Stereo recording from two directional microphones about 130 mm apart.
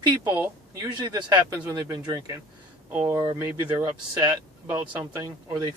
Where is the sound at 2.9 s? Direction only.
15° right (ahead or behind).